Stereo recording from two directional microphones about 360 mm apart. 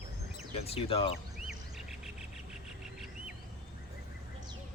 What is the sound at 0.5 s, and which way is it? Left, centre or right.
Speech, centre.